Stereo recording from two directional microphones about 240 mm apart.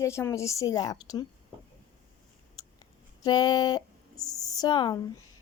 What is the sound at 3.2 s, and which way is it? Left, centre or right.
A woman's voice, centre.